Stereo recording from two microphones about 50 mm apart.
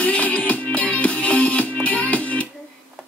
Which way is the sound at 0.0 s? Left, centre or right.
Left.